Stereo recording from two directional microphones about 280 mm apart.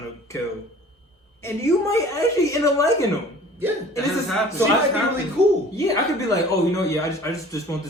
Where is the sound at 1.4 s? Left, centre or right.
Centre.